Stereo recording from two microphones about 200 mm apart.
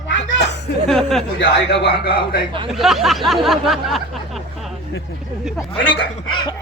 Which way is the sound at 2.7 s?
Centre (ahead or behind).